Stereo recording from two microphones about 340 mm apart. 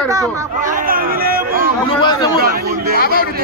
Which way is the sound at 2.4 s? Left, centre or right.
Right.